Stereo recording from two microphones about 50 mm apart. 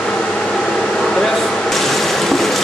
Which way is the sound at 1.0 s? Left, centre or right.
Centre.